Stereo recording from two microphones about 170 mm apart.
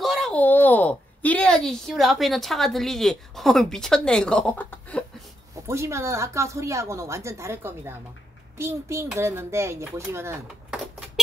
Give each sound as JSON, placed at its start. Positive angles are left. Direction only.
{"t": 0.0, "sound": "speech", "side_deg": 5}
{"t": 5.7, "sound": "a woman's voice", "side_deg": -15}